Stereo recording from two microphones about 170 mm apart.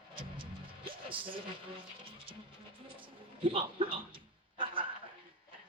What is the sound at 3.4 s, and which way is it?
Speech, 35° right (ahead or behind).